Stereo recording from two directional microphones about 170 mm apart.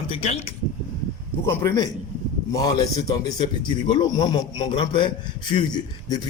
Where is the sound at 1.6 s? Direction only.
20° left (ahead or behind).